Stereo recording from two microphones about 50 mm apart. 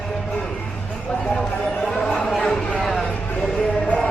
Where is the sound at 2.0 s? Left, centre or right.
Centre.